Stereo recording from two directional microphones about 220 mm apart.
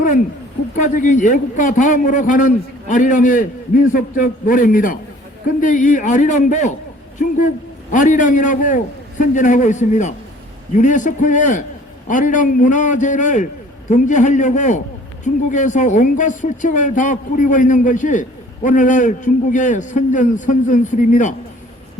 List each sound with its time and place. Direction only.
0.8 s speech: 35° left (ahead or behind)
7.9 s speech: 35° left (ahead or behind)